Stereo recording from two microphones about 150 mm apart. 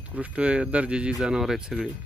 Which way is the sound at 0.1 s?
10° right (ahead or behind).